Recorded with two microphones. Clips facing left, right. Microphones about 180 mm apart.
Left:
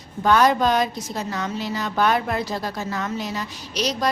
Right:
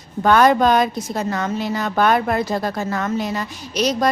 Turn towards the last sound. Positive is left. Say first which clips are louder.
# right 5 dB
turn(degrees=-50)  # may be behind; listen again after turning